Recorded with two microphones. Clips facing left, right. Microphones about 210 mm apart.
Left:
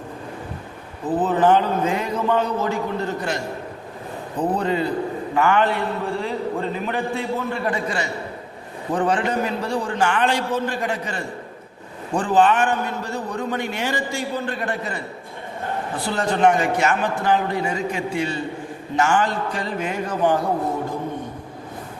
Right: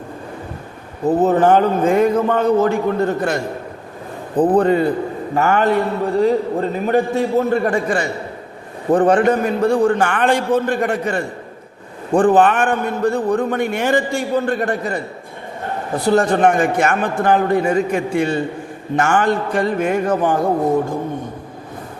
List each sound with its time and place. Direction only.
1.0 s a man's voice: 45° right (ahead or behind)